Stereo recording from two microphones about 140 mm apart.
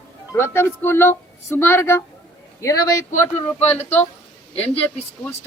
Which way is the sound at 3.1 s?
60° left (ahead or behind).